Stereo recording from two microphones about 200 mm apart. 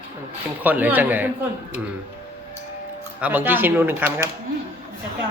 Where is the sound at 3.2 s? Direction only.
5° right (ahead or behind).